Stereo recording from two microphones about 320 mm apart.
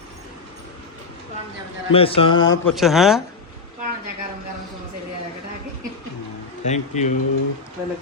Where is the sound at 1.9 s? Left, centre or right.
Centre.